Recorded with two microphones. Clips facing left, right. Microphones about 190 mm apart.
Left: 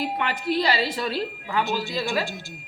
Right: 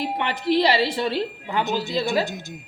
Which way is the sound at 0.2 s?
25° right (ahead or behind).